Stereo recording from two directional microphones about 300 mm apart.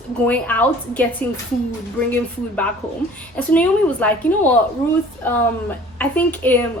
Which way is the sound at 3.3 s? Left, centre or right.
Centre.